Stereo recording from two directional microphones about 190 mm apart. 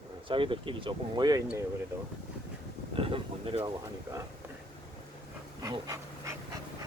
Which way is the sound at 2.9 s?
30° right (ahead or behind).